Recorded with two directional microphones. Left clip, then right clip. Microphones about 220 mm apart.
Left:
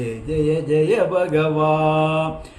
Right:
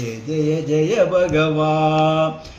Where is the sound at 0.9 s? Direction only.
15° left (ahead or behind).